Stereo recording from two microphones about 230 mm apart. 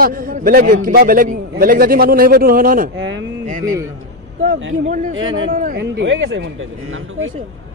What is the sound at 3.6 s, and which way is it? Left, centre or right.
Speech, centre.